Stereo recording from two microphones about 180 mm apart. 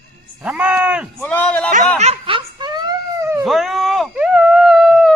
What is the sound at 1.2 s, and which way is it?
Speech, 5° left (ahead or behind).